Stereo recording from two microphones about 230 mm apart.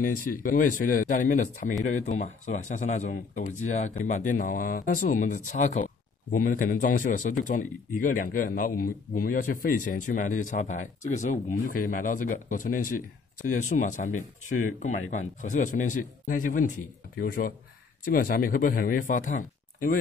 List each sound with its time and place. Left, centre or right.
0.4 s speech: left